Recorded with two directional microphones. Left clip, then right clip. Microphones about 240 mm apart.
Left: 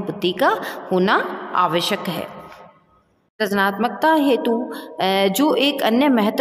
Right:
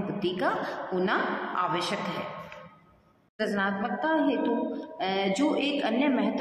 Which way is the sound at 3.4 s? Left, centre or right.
Left.